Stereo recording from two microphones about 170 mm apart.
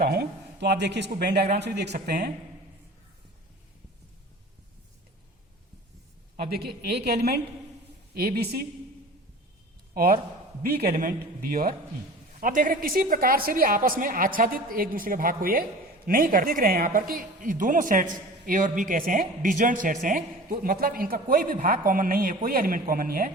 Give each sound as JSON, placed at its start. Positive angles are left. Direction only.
{"t": 0.0, "sound": "speech", "side_deg": -65}
{"t": 6.5, "sound": "a woman's voice", "side_deg": -70}
{"t": 9.9, "sound": "a man's voice", "side_deg": -60}